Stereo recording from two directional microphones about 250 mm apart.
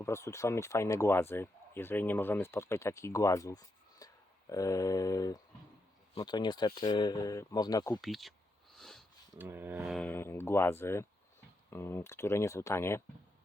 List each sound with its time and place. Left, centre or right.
0.0 s speech: centre
8.0 s speech: centre
8.7 s a sound: centre
9.3 s speech: centre